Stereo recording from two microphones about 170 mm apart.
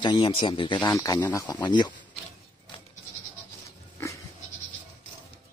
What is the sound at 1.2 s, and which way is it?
Speech, 10° left (ahead or behind).